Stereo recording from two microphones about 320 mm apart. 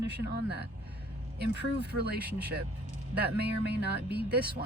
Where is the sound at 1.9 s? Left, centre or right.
Right.